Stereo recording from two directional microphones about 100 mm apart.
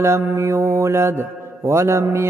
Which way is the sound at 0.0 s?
30° right (ahead or behind).